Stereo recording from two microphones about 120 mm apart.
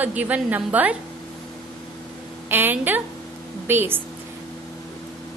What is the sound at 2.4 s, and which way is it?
A woman's voice, 15° right (ahead or behind).